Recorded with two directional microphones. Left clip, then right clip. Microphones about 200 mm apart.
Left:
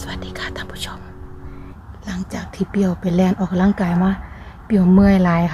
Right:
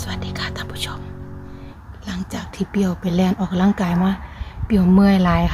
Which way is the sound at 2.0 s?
Centre (ahead or behind).